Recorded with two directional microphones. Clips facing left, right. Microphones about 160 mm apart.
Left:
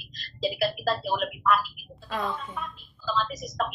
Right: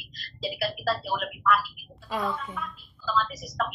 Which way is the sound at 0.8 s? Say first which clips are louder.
Left 2 dB; 20° left (ahead or behind).